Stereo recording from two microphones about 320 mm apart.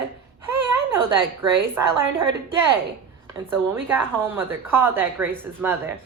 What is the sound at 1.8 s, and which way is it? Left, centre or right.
Speech, centre.